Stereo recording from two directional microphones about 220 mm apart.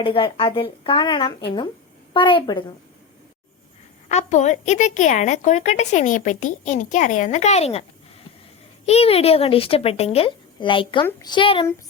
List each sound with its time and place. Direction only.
0.0 s speech: 25° left (ahead or behind)
4.1 s a woman's voice: 35° left (ahead or behind)
8.9 s speech: 25° left (ahead or behind)